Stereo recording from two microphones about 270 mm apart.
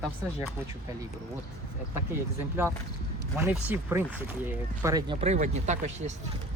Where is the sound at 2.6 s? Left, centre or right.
Centre; by 6.1 s right.